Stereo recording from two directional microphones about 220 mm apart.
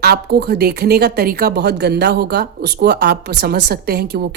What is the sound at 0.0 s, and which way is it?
A woman's voice, 45° right (ahead or behind).